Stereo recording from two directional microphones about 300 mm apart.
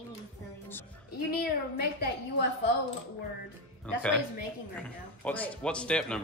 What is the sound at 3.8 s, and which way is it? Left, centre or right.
Speech, centre.